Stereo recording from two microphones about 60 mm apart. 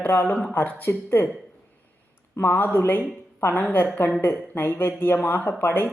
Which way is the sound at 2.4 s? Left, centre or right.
Left.